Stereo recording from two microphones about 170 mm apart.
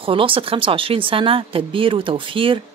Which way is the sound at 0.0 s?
30° right (ahead or behind).